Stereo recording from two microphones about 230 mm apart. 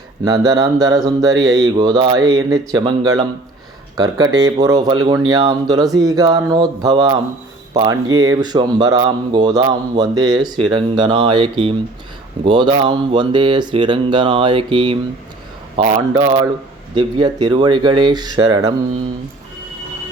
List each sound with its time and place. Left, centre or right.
0.3 s speech: centre